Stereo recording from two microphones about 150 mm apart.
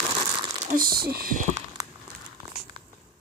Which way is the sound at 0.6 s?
70° right (ahead or behind).